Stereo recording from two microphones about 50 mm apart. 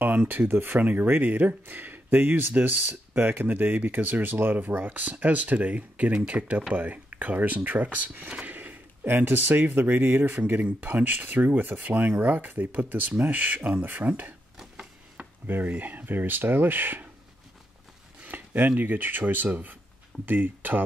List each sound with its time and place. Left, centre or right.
0.0 s speech: right
8.5 s gasp: right
9.2 s speech: right
15.4 s speech: right
18.2 s speech: right